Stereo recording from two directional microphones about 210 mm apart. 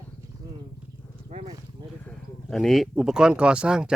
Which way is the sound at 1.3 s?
30° right (ahead or behind).